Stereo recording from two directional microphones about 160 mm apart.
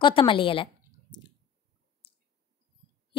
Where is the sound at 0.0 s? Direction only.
35° left (ahead or behind).